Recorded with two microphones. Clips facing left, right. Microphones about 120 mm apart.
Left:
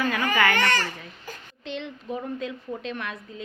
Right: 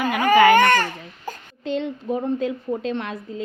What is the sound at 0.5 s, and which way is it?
Speech, 50° right (ahead or behind).